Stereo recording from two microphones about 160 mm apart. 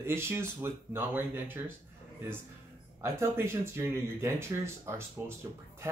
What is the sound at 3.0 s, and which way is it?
Speech, 15° right (ahead or behind).